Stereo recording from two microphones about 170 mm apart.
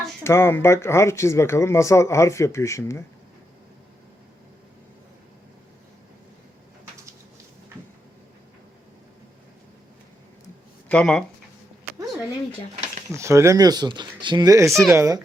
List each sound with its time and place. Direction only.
0.3 s speech: 15° left (ahead or behind)
10.8 s speech: 5° left (ahead or behind)
12.7 s a sound: 40° right (ahead or behind)
13.1 s speech: 15° right (ahead or behind)